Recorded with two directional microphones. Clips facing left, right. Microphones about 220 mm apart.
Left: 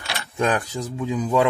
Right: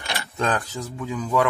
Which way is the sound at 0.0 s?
15° left (ahead or behind).